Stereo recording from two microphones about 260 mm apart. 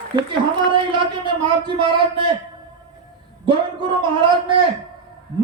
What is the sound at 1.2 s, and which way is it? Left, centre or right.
Speech, centre.